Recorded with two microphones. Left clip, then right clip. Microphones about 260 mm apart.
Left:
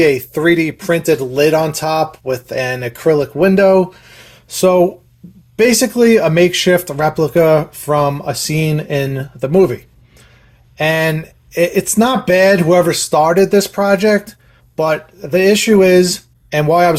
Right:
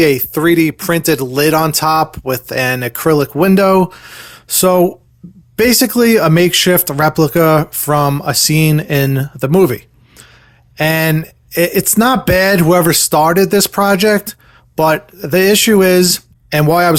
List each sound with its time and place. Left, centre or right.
0.0 s speech: right